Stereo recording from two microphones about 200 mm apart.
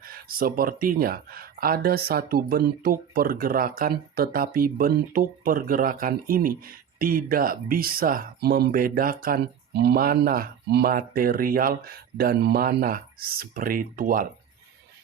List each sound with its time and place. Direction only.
0.0 s speech: 45° right (ahead or behind)